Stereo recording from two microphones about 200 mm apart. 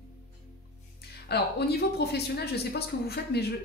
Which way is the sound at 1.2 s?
55° left (ahead or behind).